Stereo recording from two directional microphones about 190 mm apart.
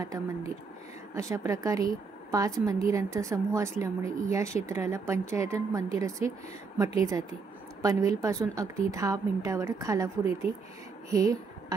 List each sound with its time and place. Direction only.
0.0 s a woman's voice: 20° right (ahead or behind)